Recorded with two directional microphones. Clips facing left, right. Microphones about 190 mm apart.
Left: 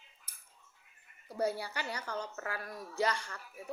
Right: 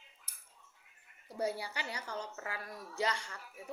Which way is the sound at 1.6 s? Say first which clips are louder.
Left 2 dB; 20° right (ahead or behind).